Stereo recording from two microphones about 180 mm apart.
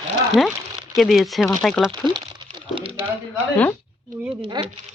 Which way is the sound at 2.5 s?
30° right (ahead or behind).